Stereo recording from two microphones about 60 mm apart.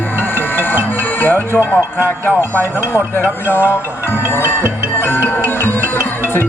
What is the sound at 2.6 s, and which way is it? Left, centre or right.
Music, left.